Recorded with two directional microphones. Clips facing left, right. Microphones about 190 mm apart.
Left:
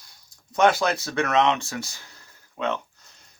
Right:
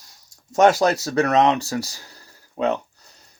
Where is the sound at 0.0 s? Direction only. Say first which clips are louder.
Right 2 dB; 40° right (ahead or behind).